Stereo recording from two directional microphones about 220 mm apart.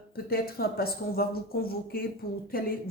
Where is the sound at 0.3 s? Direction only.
45° left (ahead or behind).